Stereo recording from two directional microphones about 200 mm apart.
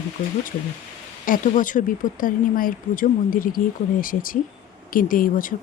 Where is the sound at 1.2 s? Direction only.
40° left (ahead or behind).